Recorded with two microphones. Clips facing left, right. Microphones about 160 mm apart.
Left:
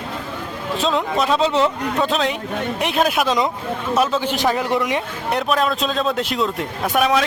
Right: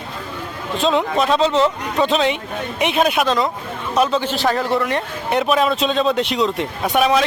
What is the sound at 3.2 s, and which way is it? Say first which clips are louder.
Speech: right 1 dB; 15° left (ahead or behind).